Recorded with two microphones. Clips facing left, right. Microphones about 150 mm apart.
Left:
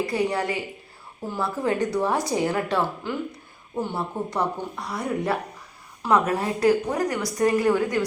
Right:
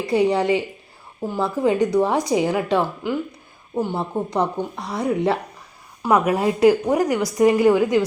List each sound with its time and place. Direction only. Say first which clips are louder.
0.1 s speech: right 7 dB; 20° right (ahead or behind)
6.0 s speech: right 3 dB; 15° right (ahead or behind)